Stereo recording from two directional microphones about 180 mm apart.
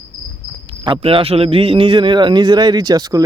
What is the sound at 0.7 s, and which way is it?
A man's voice, 30° right (ahead or behind).